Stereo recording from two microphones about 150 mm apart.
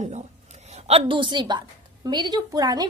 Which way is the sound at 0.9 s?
40° right (ahead or behind).